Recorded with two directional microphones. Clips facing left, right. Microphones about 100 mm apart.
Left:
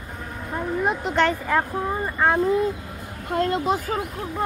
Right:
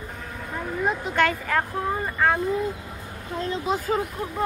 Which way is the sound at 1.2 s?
20° left (ahead or behind).